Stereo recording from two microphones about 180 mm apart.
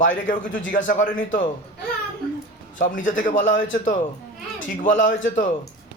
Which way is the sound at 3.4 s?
90° left.